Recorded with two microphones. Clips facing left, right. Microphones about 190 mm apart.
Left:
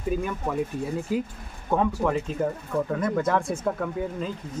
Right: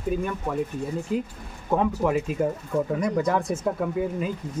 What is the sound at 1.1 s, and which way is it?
Speech, centre (ahead or behind).